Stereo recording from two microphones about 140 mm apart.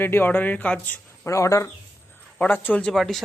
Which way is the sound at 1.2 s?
20° left (ahead or behind).